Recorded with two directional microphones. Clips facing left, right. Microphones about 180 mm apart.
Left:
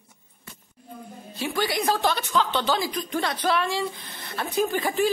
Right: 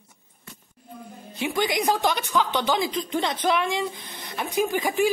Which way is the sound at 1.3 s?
20° right (ahead or behind).